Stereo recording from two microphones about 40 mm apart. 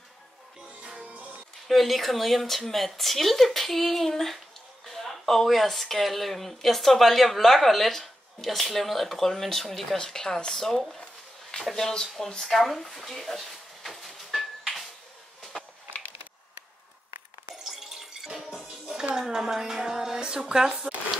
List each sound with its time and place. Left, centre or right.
0.7 s music: right
1.7 s speech: centre
17.6 s music: centre
19.1 s speech: centre